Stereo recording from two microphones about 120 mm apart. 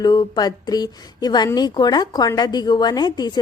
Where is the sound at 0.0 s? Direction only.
35° left (ahead or behind).